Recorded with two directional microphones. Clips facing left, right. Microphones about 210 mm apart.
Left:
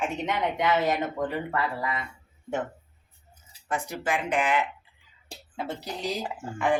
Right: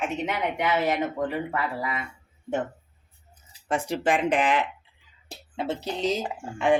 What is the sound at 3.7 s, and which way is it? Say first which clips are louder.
Speech: right 5 dB; 30° right (ahead or behind).